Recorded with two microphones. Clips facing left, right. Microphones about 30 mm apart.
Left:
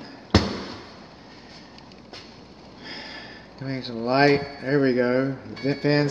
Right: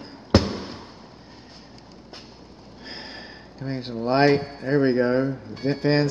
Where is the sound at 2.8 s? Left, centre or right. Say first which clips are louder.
Left 1 dB; centre.